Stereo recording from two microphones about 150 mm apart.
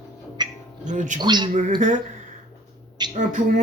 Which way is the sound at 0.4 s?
30° right (ahead or behind).